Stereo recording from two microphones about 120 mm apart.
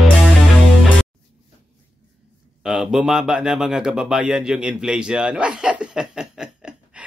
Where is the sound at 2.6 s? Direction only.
5° right (ahead or behind).